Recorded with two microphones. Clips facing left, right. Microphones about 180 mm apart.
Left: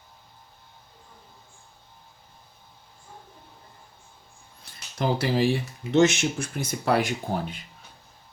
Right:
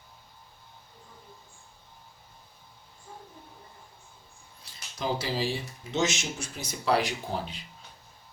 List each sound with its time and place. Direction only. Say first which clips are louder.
4.7 s speech: left 5 dB; 60° left (ahead or behind)